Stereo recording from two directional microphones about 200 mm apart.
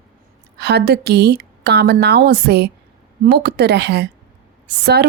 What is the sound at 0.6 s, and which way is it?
A woman's voice, 55° right (ahead or behind).